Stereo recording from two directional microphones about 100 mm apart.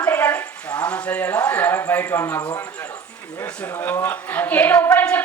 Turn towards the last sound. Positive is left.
turn(degrees=15)  # may be behind; listen again after turning